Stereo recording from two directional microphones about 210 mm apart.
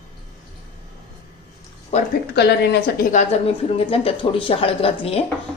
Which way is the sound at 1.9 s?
30° left (ahead or behind).